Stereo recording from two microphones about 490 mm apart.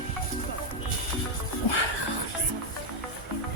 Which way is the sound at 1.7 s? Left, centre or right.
Left.